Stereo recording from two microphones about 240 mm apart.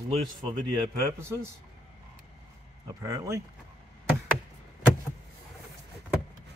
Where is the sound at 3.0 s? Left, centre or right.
Centre.